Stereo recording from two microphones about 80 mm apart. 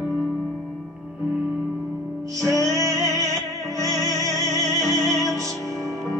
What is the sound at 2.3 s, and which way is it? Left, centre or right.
Music, right.